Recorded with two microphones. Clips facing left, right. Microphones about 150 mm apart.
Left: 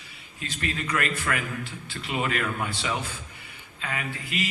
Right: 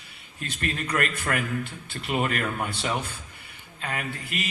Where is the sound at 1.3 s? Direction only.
40° right (ahead or behind).